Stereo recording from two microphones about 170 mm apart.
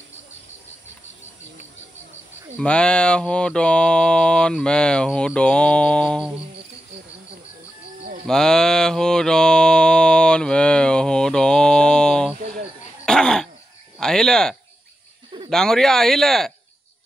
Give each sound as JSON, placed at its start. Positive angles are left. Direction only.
{"t": 2.5, "sound": "mantra", "side_deg": 5}
{"t": 8.3, "sound": "mantra", "side_deg": 5}
{"t": 12.4, "sound": "a sound", "side_deg": -45}
{"t": 13.0, "sound": "a sound", "side_deg": 5}
{"t": 13.9, "sound": "cricket", "side_deg": 5}
{"t": 15.5, "sound": "mantra", "side_deg": 5}